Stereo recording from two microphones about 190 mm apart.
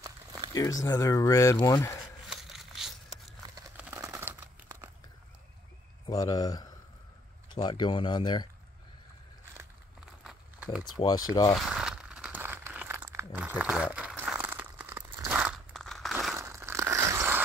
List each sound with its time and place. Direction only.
0.0 s crumpling: 20° right (ahead or behind)
0.6 s speech: 20° left (ahead or behind)
2.2 s a sound: centre (ahead or behind)
3.7 s crumpling: 15° right (ahead or behind)
6.0 s speech: 20° left (ahead or behind)
10.2 s a sound: 5° right (ahead or behind)
10.8 s speech: 20° left (ahead or behind)
11.5 s crumpling: 5° right (ahead or behind)
13.9 s a sound: 10° right (ahead or behind)
16.3 s crushing: 15° right (ahead or behind)